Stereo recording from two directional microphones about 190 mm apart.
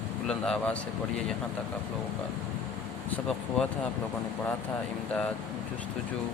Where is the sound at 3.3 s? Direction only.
5° left (ahead or behind).